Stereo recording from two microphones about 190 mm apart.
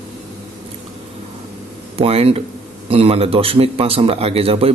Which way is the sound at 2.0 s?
30° right (ahead or behind).